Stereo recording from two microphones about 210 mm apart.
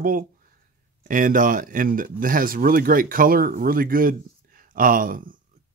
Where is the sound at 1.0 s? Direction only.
40° right (ahead or behind).